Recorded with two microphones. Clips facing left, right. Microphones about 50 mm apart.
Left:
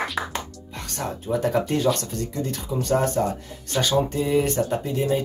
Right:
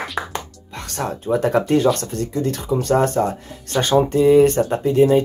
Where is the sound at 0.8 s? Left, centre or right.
Right.